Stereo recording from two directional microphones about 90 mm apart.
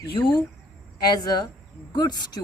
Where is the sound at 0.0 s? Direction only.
60° left (ahead or behind).